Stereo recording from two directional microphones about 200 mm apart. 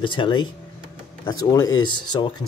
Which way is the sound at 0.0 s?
25° left (ahead or behind).